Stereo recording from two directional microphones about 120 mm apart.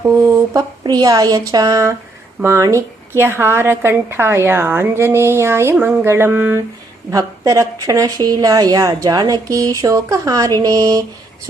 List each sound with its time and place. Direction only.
0.0 s a woman's voice: 25° right (ahead or behind)